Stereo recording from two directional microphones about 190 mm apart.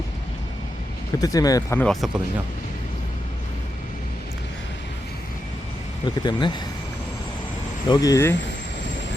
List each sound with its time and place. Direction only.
1.2 s speech: 20° left (ahead or behind)
1.8 s speech: centre (ahead or behind)
6.2 s speech: 25° left (ahead or behind)
7.9 s speech: 15° left (ahead or behind)